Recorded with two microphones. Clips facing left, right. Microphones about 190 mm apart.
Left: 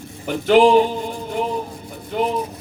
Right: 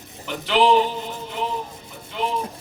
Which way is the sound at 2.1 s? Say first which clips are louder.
Left 6 dB; 45° left (ahead or behind).